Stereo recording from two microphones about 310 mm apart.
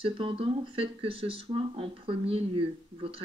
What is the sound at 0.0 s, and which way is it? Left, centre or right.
Speech, centre.